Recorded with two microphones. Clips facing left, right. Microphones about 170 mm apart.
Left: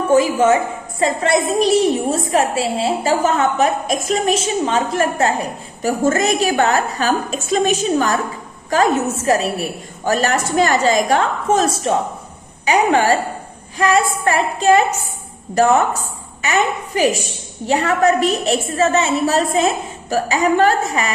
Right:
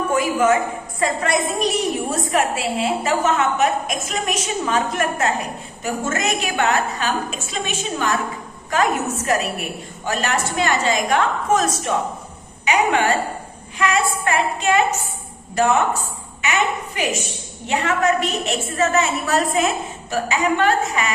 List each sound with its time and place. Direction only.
0.1 s a woman's voice: 25° left (ahead or behind)
16.4 s a woman's voice: 35° left (ahead or behind)